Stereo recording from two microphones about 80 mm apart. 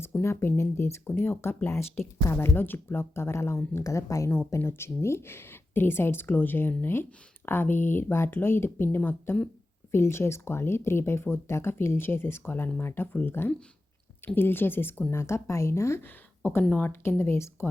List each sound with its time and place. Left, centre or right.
0.2 s speech: left
9.9 s speech: left